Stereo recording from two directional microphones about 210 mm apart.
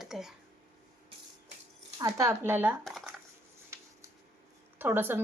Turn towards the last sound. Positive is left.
turn(degrees=-10)  # may be behind; listen again after turning